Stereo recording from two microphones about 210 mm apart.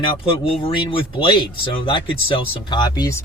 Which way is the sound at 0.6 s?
25° left (ahead or behind).